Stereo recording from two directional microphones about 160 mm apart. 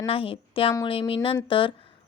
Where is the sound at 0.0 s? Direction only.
35° left (ahead or behind).